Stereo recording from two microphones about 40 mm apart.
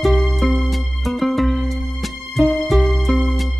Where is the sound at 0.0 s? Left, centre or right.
Centre.